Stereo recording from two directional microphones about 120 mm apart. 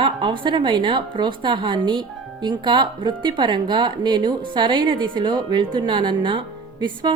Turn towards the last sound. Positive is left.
turn(degrees=-40)  # may be behind; listen again after turning